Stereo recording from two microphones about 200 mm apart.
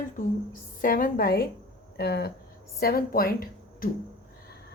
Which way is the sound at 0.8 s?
45° left (ahead or behind).